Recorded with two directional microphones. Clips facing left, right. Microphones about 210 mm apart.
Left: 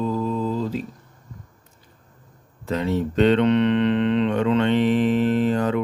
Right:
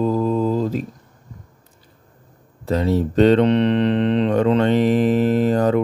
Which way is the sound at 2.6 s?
35° right (ahead or behind).